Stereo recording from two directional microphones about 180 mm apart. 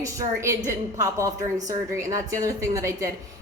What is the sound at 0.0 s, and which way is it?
A woman's voice, 20° right (ahead or behind).